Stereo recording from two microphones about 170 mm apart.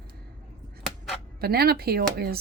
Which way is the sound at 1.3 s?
65° right (ahead or behind).